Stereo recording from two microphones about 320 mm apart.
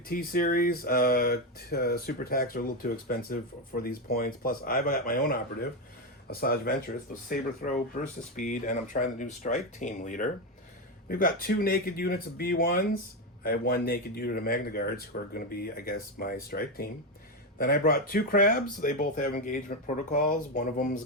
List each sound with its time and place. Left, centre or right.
0.1 s speech: left